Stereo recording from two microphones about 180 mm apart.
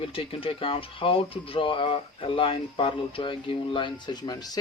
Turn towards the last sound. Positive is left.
turn(degrees=20)  # may be behind; listen again after turning